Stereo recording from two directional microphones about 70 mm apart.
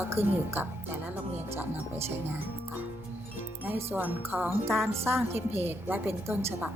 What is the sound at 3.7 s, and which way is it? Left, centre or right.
Speech, right.